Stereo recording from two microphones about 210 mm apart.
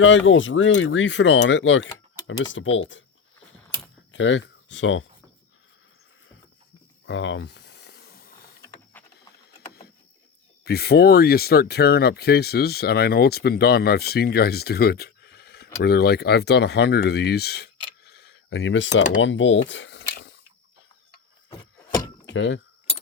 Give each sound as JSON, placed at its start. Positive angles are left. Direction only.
{"t": 0.0, "sound": "speech", "side_deg": 65}
{"t": 4.1, "sound": "speech", "side_deg": 60}
{"t": 7.1, "sound": "snake", "side_deg": 60}
{"t": 10.6, "sound": "speech", "side_deg": 50}
{"t": 19.2, "sound": "dishes", "side_deg": 60}
{"t": 22.3, "sound": "speech", "side_deg": 60}